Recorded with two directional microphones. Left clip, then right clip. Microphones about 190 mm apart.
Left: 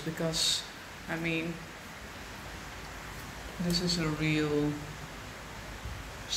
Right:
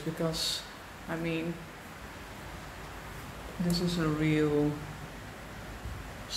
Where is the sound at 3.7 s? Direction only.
20° right (ahead or behind).